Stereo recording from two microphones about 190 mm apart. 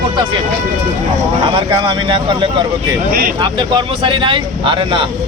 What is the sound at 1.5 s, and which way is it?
Speech, 25° right (ahead or behind).